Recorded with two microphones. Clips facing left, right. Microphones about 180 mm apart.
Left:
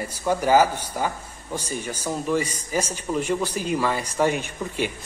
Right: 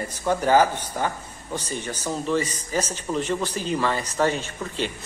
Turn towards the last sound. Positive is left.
turn(degrees=10)  # may be behind; listen again after turning